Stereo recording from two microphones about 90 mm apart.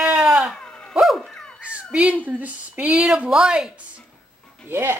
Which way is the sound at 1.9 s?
15° right (ahead or behind).